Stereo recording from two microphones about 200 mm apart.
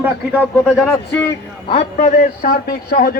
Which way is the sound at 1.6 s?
25° left (ahead or behind).